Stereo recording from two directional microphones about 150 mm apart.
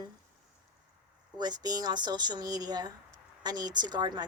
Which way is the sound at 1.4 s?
25° right (ahead or behind).